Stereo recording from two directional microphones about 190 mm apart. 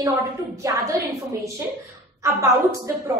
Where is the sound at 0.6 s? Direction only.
15° right (ahead or behind).